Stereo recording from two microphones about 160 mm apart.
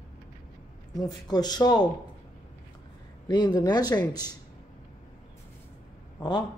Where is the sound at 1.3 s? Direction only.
25° left (ahead or behind).